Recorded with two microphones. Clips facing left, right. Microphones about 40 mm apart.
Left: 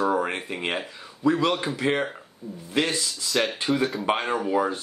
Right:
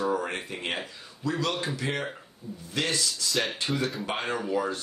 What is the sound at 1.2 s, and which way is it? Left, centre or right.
Speech, left.